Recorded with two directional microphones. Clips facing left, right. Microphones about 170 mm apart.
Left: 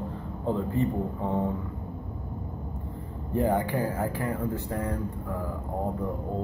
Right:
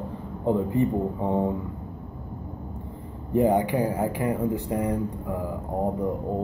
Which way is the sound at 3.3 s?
15° right (ahead or behind).